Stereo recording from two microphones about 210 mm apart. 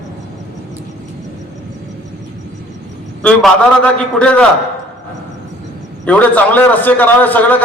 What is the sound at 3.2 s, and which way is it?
A man's voice, 5° left (ahead or behind).